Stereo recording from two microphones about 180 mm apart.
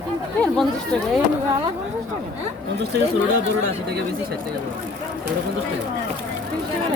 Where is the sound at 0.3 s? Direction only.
5° left (ahead or behind).